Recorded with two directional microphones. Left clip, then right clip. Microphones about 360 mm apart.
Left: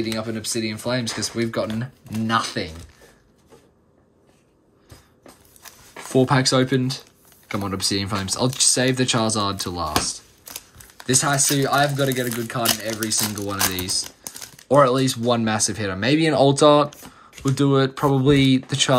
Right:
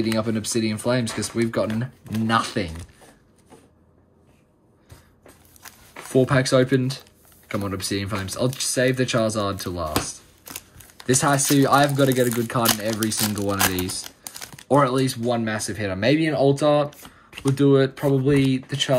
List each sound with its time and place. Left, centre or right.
0.0 s speech: centre
5.6 s zipper: centre
7.4 s speech: centre